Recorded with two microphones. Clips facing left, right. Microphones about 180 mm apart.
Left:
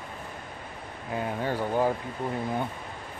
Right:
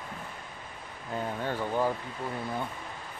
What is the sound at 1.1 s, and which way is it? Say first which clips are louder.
Speech: left 3 dB; 10° left (ahead or behind).